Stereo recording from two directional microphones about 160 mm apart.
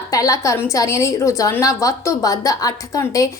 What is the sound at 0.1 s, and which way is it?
A woman's voice, 20° left (ahead or behind).